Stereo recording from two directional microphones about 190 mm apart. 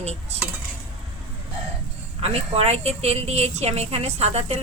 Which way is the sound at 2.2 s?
30° right (ahead or behind).